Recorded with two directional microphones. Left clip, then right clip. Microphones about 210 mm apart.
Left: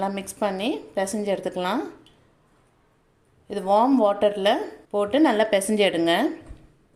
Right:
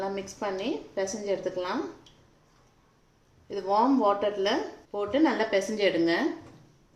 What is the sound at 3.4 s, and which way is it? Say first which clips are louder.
A woman's voice: left 5 dB; 50° left (ahead or behind).